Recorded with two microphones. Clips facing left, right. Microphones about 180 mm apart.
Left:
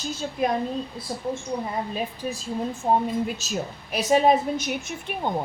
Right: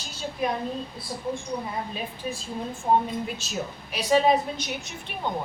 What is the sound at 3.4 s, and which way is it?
A woman's voice, 40° left (ahead or behind).